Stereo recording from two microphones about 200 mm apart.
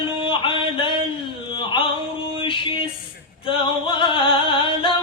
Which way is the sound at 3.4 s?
25° left (ahead or behind).